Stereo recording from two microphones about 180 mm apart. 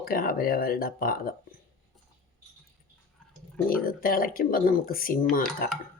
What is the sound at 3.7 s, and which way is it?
Speech, 50° left (ahead or behind).